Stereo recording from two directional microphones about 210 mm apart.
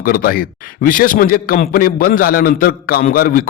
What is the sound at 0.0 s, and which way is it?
A man's voice, 45° left (ahead or behind).